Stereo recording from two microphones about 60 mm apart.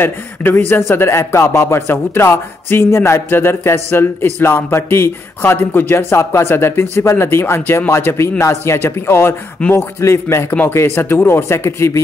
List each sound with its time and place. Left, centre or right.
0.0 s speech: left
9.6 s speech: centre
9.9 s speech: left
10.7 s speech: left